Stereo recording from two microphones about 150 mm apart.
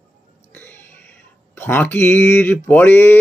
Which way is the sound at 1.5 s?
15° left (ahead or behind).